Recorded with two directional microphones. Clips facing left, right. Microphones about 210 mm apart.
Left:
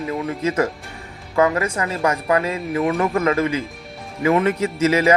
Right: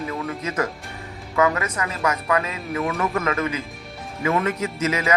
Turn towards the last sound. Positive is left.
turn(degrees=30)  # may be behind; listen again after turning